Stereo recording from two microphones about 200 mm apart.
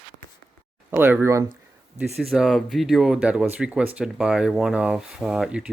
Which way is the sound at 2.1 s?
Centre (ahead or behind).